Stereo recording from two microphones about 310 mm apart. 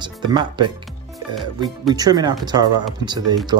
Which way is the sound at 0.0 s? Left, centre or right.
Centre.